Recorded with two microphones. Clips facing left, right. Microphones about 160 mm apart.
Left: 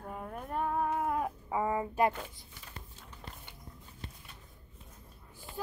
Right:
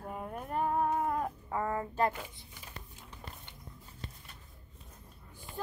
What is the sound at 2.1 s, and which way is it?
Speech, 5° right (ahead or behind).